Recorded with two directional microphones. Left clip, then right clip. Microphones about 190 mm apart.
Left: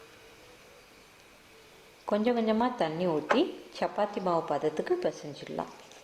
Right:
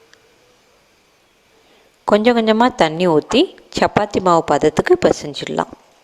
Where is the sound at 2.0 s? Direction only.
55° right (ahead or behind).